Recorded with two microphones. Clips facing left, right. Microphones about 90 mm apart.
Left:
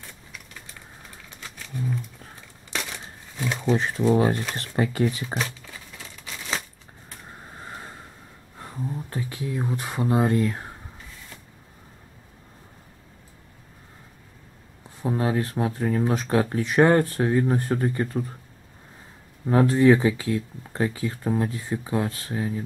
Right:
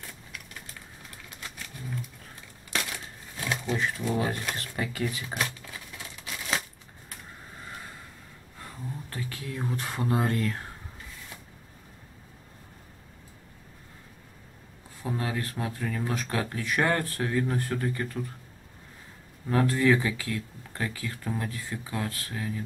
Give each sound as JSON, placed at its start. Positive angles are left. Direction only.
{"t": 2.7, "sound": "a sound", "side_deg": 0}
{"t": 3.7, "sound": "speech", "side_deg": 30}
{"t": 5.4, "sound": "crumpling", "side_deg": -5}
{"t": 8.5, "sound": "speech", "side_deg": 20}
{"t": 15.0, "sound": "speech", "side_deg": 25}
{"t": 19.4, "sound": "speech", "side_deg": 25}